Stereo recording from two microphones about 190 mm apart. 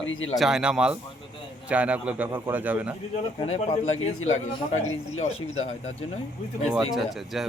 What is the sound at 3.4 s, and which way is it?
Speech, 35° left (ahead or behind).